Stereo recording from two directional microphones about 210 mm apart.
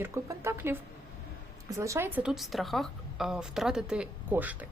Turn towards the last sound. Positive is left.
turn(degrees=-5)  # may be behind; listen again after turning